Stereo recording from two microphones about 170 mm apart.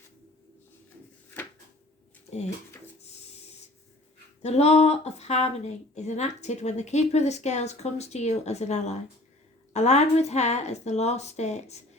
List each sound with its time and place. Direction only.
4.4 s speech: 40° left (ahead or behind)